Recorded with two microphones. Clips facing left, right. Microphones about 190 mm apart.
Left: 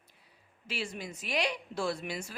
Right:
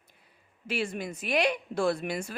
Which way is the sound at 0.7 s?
55° right (ahead or behind).